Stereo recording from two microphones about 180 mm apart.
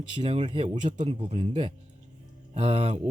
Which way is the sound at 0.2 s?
40° right (ahead or behind).